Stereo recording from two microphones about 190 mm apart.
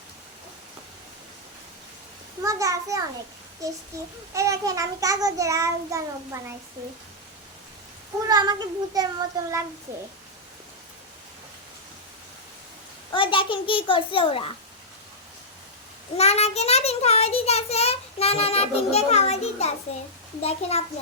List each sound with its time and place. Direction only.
2.4 s child singing: 15° right (ahead or behind)
4.4 s child singing: 15° right (ahead or behind)
8.3 s child singing: 20° right (ahead or behind)
13.1 s a child's voice: 25° left (ahead or behind)
16.1 s a child's voice: 35° left (ahead or behind)